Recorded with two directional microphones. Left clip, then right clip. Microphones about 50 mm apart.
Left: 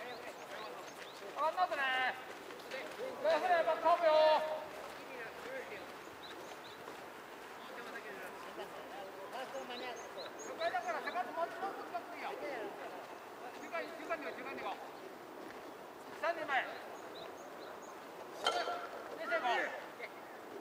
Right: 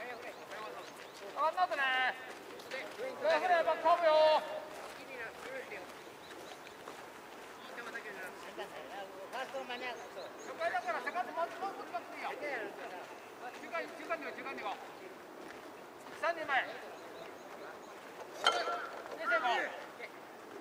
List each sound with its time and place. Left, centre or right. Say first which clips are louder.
1.4 s speech: right 2 dB; centre
9.3 s speech: right 4 dB; right
13.7 s speech: right 2 dB; centre
16.2 s speech: right 2 dB; centre
18.4 s a sound: right 4 dB; right
19.5 s a sound: right 1 dB; centre